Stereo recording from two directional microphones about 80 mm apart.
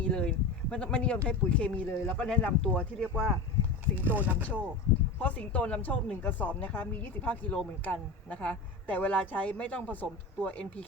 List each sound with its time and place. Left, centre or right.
0.0 s speech: centre
3.9 s speech: right
5.2 s speech: centre